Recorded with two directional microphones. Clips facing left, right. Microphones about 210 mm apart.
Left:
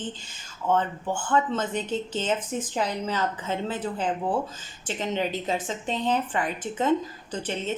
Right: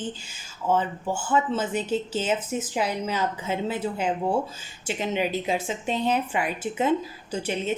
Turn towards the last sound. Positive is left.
turn(degrees=-10)  # may be behind; listen again after turning